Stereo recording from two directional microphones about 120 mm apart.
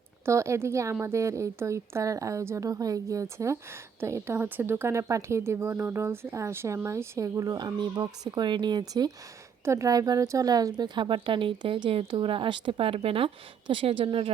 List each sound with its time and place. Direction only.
0.3 s a woman's voice: 25° right (ahead or behind); by 14.3 s 50° right (ahead or behind)